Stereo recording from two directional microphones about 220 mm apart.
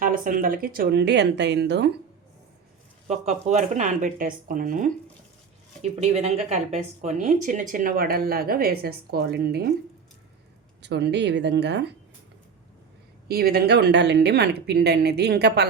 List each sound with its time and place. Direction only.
0.0 s speech: 40° right (ahead or behind)
3.1 s speech: 30° right (ahead or behind); by 9.7 s 45° right (ahead or behind)
10.8 s speech: 50° right (ahead or behind)
13.2 s speech: 45° right (ahead or behind)